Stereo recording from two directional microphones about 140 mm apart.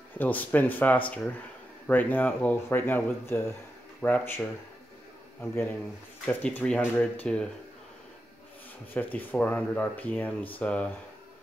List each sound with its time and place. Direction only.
0.2 s speech: 10° left (ahead or behind)
5.4 s speech: 15° left (ahead or behind)
8.9 s speech: 10° left (ahead or behind)